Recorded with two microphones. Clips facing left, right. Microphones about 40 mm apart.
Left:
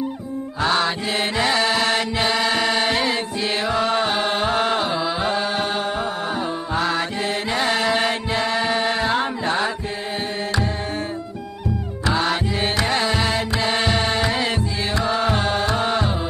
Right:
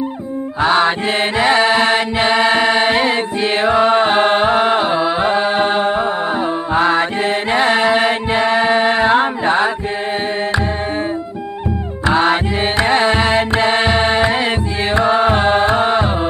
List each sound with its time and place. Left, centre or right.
0.6 s music: right
12.1 s music: right